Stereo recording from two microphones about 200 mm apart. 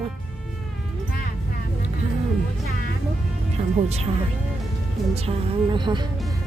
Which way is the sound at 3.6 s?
35° right (ahead or behind).